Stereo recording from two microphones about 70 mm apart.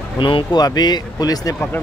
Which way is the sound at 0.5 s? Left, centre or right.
Left.